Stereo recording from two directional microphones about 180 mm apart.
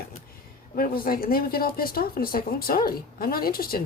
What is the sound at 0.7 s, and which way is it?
Speech, 55° left (ahead or behind).